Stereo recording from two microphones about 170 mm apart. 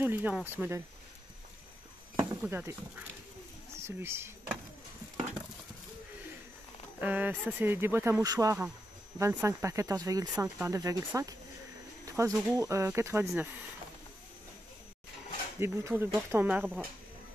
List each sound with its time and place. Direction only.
0.0 s speech: 10° right (ahead or behind)
2.1 s speech: 10° right (ahead or behind)
7.0 s speech: 10° right (ahead or behind)
15.6 s speech: 15° right (ahead or behind)